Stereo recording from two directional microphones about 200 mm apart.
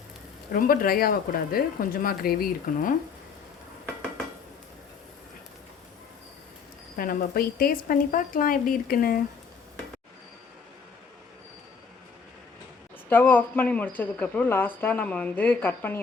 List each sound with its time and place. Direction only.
0.5 s speech: 45° left (ahead or behind)
6.9 s speech: 45° left (ahead or behind)
13.1 s speech: 10° left (ahead or behind)